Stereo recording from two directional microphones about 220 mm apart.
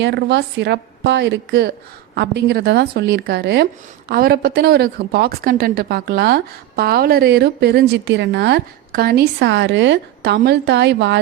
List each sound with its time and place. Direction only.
0.0 s a woman's voice: 50° right (ahead or behind)